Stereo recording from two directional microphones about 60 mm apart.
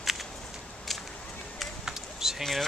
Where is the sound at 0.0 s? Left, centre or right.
Centre.